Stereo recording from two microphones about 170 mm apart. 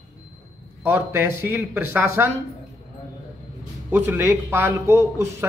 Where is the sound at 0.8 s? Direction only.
10° right (ahead or behind).